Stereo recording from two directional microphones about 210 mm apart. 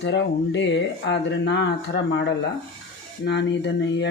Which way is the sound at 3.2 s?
55° left (ahead or behind).